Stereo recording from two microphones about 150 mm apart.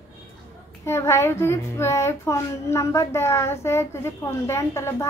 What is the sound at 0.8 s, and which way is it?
A child's voice, 20° left (ahead or behind).